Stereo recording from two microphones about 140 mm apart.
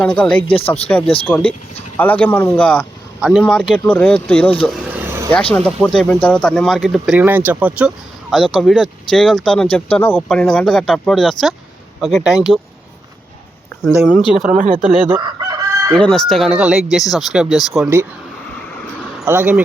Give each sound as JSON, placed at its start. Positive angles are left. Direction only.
{"t": 0.0, "sound": "speech", "side_deg": 10}
{"t": 0.4, "sound": "speech", "side_deg": 40}
{"t": 1.3, "sound": "speech", "side_deg": 5}
{"t": 3.2, "sound": "speech", "side_deg": -5}
{"t": 4.6, "sound": "a sound", "side_deg": -5}
{"t": 5.5, "sound": "speech", "side_deg": 5}
{"t": 8.3, "sound": "speech", "side_deg": 0}
{"t": 13.8, "sound": "speech", "side_deg": 0}
{"t": 14.5, "sound": "speech", "side_deg": -65}
{"t": 14.8, "sound": "speech", "side_deg": -10}
{"t": 15.2, "sound": "chicken", "side_deg": -25}
{"t": 15.9, "sound": "speech", "side_deg": 5}
{"t": 19.2, "sound": "speech", "side_deg": -15}